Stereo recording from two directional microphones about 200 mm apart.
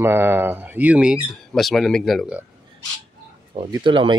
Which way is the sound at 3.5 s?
25° right (ahead or behind).